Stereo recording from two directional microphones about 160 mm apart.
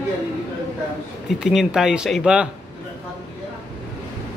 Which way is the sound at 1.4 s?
Centre (ahead or behind).